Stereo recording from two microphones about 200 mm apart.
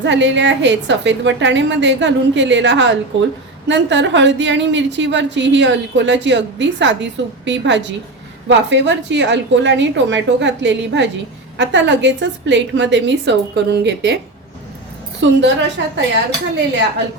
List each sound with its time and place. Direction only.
0.0 s a woman's voice: 65° right (ahead or behind)
15.4 s a woman's voice: 65° right (ahead or behind)